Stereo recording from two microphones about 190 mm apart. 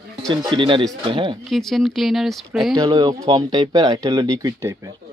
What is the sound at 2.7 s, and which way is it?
Speech, 20° right (ahead or behind).